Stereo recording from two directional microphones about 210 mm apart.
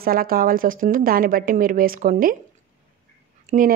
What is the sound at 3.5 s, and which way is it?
Speech, 40° right (ahead or behind).